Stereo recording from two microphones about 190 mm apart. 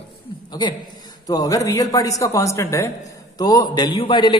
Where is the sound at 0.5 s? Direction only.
25° left (ahead or behind).